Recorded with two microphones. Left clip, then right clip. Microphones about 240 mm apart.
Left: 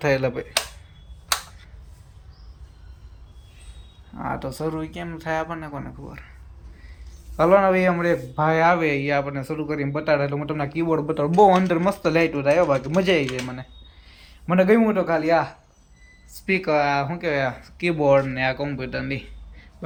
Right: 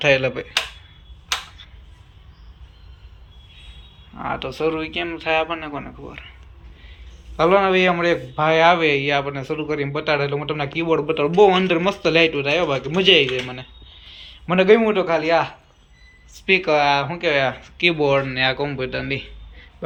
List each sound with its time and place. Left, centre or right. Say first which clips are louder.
0.0 s a man's voice: right 4 dB; centre
4.1 s speech: right 3 dB; left
7.3 s a man's voice: right 1 dB; centre